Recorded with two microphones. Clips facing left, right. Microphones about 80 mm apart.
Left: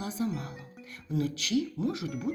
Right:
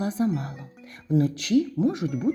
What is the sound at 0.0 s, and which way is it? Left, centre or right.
Speech, right.